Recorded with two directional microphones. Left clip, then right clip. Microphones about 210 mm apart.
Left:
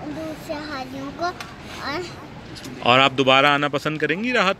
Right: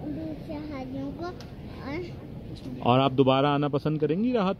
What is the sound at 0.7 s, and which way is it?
A man's voice, 5° left (ahead or behind).